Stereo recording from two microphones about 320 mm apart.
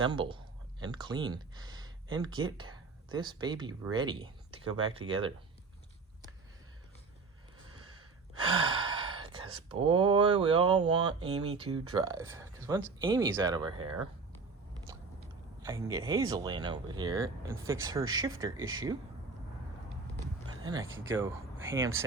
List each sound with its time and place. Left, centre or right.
0.0 s speech: centre
8.4 s speech: centre
15.6 s speech: centre
20.6 s a sound: centre
21.0 s speech: centre